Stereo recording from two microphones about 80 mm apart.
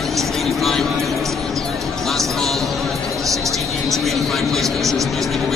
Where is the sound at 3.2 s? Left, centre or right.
Right.